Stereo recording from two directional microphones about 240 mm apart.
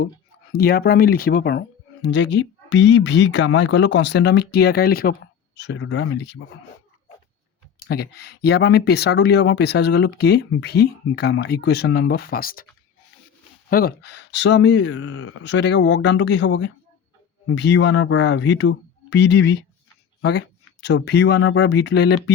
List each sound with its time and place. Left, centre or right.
0.5 s speech: left
7.8 s speech: left
13.7 s speech: left
20.8 s speech: left